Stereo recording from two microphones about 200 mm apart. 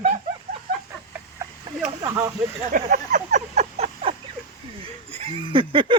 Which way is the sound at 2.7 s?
40° right (ahead or behind).